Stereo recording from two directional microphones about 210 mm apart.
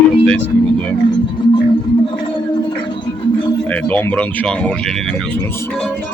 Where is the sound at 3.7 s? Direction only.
5° left (ahead or behind).